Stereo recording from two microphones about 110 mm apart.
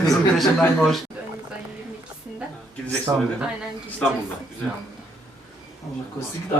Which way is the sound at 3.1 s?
25° right (ahead or behind).